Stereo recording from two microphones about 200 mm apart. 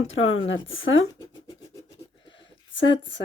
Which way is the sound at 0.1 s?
75° left (ahead or behind).